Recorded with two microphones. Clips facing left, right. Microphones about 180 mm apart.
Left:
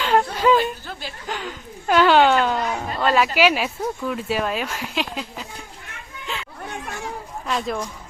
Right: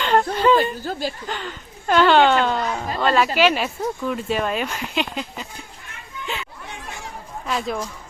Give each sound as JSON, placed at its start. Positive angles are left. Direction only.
{"t": 0.0, "sound": "a sound", "side_deg": 5}
{"t": 0.8, "sound": "chuckle", "side_deg": -40}
{"t": 1.3, "sound": "speech", "side_deg": 5}
{"t": 7.4, "sound": "speech", "side_deg": 0}